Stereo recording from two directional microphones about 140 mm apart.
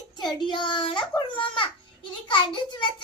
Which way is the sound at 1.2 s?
35° left (ahead or behind).